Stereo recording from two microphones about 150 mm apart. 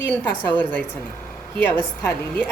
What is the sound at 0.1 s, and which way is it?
Speech, 10° left (ahead or behind).